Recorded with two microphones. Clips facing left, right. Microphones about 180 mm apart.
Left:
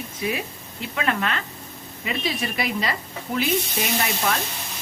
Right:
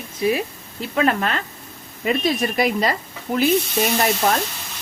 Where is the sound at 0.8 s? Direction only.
40° right (ahead or behind).